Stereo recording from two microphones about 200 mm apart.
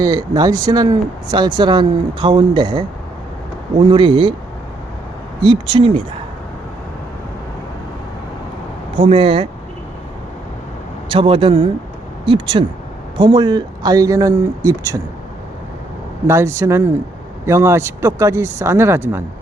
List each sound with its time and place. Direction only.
0.0 s speech: 20° right (ahead or behind)
5.4 s speech: 25° right (ahead or behind)
9.0 s speech: 30° right (ahead or behind)
11.1 s speech: 25° right (ahead or behind)
16.2 s speech: 15° right (ahead or behind)